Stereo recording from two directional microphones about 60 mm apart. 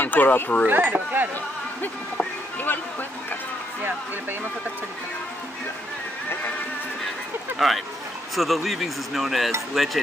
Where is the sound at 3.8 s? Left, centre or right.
Right.